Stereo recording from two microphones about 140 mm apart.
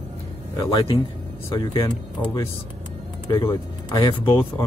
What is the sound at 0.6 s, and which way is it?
Speech, 35° left (ahead or behind).